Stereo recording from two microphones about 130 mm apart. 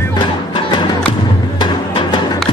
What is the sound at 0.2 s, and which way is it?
Music, 35° left (ahead or behind).